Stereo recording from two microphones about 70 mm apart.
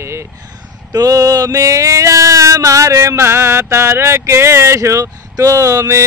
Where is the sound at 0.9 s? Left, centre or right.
Right.